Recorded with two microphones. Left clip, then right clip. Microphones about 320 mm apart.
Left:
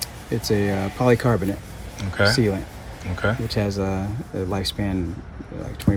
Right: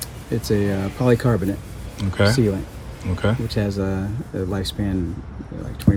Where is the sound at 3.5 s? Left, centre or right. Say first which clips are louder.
Even; centre.